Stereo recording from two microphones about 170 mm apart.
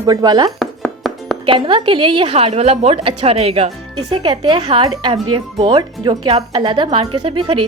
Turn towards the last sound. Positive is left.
turn(degrees=-30)  # may be behind; listen again after turning